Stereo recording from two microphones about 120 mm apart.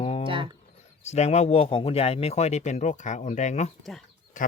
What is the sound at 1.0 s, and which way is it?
Speech, 65° left (ahead or behind).